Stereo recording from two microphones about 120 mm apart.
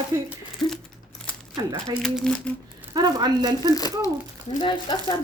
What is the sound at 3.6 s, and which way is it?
Speech, 30° left (ahead or behind).